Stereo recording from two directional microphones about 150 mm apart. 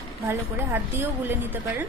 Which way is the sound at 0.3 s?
15° right (ahead or behind).